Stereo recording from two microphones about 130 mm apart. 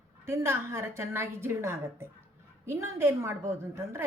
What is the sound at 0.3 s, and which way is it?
A woman's voice, 20° right (ahead or behind).